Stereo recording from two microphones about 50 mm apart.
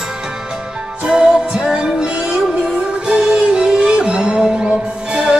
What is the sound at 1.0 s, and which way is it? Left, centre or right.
Music, centre.